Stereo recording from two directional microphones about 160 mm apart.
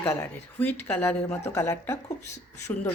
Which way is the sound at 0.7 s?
10° left (ahead or behind).